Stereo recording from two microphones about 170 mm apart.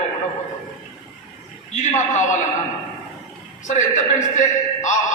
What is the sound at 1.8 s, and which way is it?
Speech, 45° left (ahead or behind).